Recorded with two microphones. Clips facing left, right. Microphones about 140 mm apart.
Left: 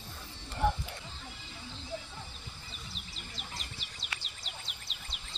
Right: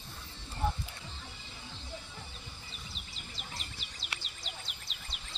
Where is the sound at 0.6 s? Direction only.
90° left.